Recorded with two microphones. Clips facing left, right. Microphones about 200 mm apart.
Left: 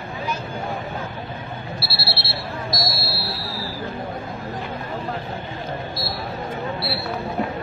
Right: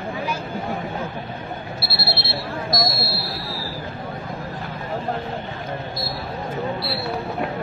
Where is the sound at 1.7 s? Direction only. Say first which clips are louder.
Right 2 dB; 50° right (ahead or behind).